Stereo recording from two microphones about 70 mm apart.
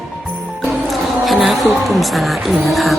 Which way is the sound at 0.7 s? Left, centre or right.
Centre.